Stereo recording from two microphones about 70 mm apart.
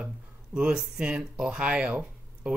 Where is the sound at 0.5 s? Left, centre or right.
Centre.